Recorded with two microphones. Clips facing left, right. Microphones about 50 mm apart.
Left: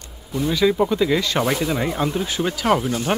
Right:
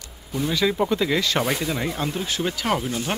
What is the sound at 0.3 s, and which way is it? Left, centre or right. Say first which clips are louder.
Speech: left 4 dB; centre.